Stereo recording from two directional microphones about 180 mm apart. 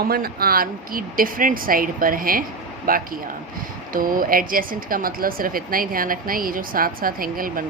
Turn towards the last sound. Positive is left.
turn(degrees=-50)  # may be behind; listen again after turning